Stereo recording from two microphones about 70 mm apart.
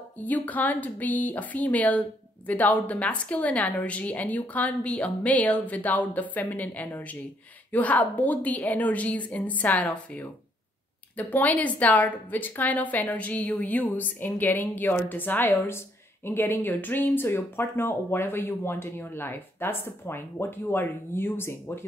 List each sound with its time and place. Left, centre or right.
0.2 s speech: left
11.1 s speech: left